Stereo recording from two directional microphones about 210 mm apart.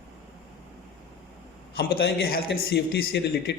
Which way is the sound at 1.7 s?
45° left (ahead or behind).